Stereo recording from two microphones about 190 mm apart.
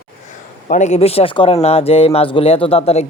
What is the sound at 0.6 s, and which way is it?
A man's voice, 40° left (ahead or behind).